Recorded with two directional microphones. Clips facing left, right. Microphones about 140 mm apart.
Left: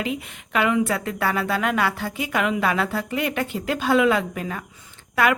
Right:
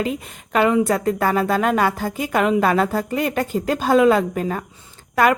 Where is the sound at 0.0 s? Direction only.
40° right (ahead or behind).